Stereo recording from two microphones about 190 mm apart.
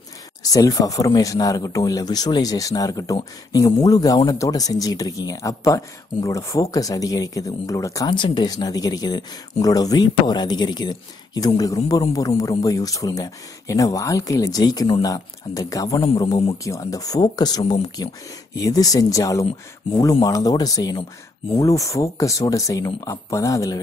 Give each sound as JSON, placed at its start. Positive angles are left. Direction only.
{"t": 0.4, "sound": "speech", "side_deg": 20}